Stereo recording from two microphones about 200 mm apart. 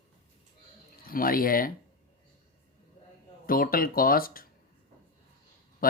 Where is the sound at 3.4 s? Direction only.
45° left (ahead or behind).